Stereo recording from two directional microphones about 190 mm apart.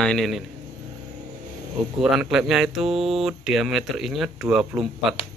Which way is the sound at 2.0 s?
Centre (ahead or behind).